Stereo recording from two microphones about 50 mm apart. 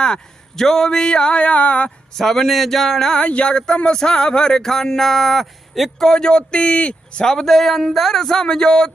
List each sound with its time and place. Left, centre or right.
0.0 s speech: centre
2.1 s speech: centre
6.1 s speech: centre
7.3 s speech: centre